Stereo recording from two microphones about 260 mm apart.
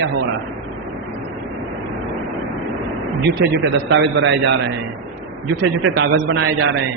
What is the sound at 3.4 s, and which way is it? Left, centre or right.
A man's voice, right.